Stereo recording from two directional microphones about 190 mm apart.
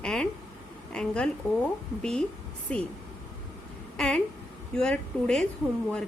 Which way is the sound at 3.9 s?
5° left (ahead or behind).